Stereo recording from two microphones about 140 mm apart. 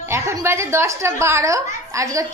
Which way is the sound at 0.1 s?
20° right (ahead or behind).